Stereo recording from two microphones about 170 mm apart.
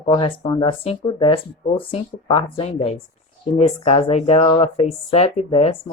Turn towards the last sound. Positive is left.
turn(degrees=40)  # may be behind; listen again after turning